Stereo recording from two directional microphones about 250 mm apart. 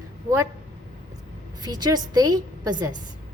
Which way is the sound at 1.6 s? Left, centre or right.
Centre.